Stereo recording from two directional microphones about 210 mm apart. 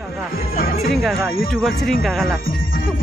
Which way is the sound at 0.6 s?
45° left (ahead or behind).